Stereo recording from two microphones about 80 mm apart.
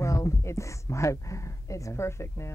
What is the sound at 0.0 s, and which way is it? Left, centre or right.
Speech, left.